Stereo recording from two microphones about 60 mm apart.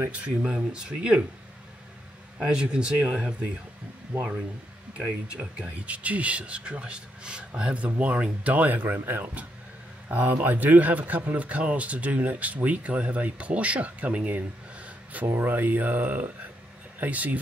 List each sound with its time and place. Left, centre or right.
0.1 s speech: centre
2.3 s speech: centre
4.9 s speech: centre